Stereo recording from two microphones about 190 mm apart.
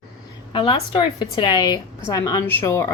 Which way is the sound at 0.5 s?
25° left (ahead or behind).